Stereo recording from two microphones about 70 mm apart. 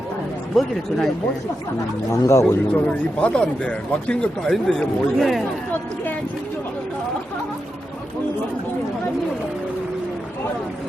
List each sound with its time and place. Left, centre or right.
0.5 s speech: centre
2.0 s speech: left
2.7 s speech: centre